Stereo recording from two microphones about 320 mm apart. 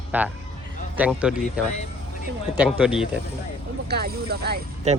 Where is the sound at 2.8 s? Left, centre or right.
Centre.